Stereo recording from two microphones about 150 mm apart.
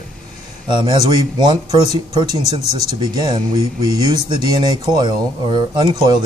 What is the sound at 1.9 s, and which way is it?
Speech, 45° left (ahead or behind).